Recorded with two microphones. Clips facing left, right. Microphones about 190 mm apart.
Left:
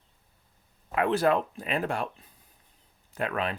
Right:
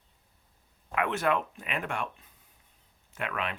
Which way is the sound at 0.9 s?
35° left (ahead or behind).